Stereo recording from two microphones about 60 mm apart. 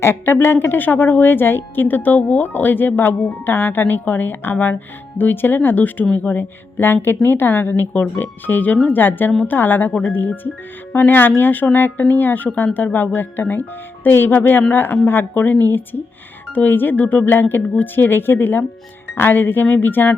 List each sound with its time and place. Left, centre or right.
0.0 s a woman's voice: left